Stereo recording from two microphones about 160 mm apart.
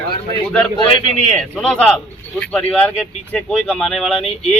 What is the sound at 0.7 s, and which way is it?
Speech, 30° left (ahead or behind).